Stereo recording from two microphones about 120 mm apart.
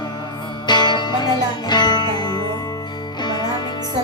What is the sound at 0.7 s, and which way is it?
Music, 40° left (ahead or behind).